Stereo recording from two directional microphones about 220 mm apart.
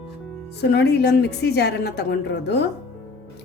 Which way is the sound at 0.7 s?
50° left (ahead or behind).